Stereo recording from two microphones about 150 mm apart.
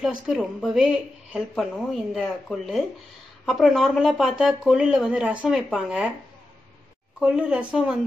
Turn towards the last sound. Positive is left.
turn(degrees=-5)  # may be behind; listen again after turning